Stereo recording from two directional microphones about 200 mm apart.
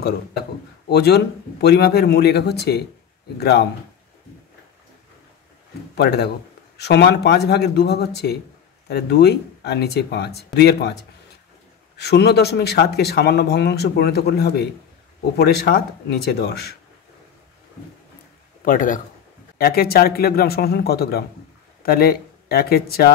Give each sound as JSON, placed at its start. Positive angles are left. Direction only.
{"t": 0.8, "sound": "speech", "side_deg": 55}
{"t": 5.9, "sound": "speech", "side_deg": 55}
{"t": 12.0, "sound": "speech", "side_deg": 55}
{"t": 18.6, "sound": "a man's voice", "side_deg": 40}